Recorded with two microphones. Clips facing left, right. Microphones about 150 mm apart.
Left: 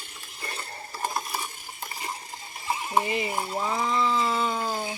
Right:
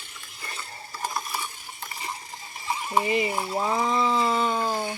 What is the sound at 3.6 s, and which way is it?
Speech, 25° right (ahead or behind).